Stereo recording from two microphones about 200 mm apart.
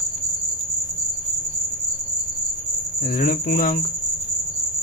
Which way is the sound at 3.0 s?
40° left (ahead or behind).